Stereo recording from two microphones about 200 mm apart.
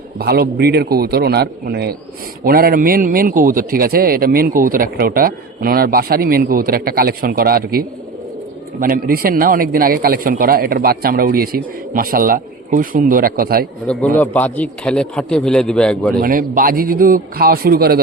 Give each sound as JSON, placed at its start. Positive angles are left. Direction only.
{"t": 0.2, "sound": "a man's voice", "side_deg": -50}
{"t": 13.8, "sound": "a man's voice", "side_deg": 5}
{"t": 16.2, "sound": "a man's voice", "side_deg": -45}